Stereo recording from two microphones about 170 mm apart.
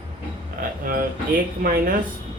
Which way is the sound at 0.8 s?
55° right (ahead or behind).